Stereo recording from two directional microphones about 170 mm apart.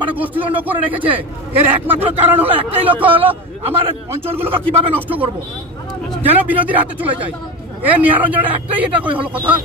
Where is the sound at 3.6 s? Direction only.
35° right (ahead or behind).